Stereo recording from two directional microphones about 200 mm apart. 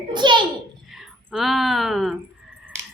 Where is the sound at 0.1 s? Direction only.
20° right (ahead or behind).